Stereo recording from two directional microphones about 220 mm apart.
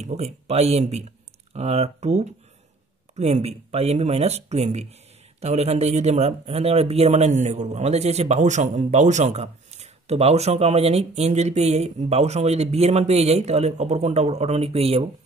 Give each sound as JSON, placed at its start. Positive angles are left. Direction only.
{"t": 0.0, "sound": "speech", "side_deg": -30}